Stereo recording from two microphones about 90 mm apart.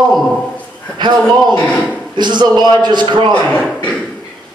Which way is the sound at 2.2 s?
55° right (ahead or behind).